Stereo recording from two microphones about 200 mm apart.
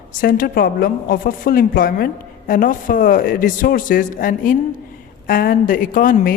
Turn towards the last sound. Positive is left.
turn(degrees=45)  # may be behind; listen again after turning